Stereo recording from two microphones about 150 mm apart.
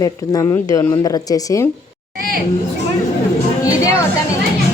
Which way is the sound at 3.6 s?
25° left (ahead or behind).